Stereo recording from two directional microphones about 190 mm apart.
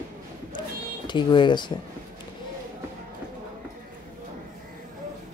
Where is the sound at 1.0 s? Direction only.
25° left (ahead or behind).